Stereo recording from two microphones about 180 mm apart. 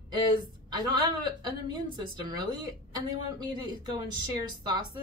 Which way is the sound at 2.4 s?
25° right (ahead or behind).